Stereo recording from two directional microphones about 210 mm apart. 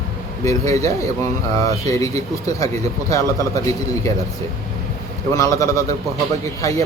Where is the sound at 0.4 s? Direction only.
15° left (ahead or behind).